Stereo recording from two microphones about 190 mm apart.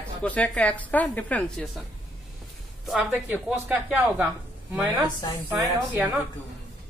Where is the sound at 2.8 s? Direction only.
5° right (ahead or behind).